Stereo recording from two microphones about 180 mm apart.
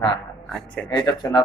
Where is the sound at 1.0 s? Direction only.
25° left (ahead or behind).